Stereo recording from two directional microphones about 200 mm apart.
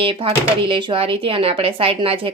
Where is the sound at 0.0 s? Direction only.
25° right (ahead or behind).